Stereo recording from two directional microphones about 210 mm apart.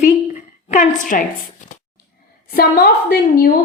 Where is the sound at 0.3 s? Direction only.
35° left (ahead or behind).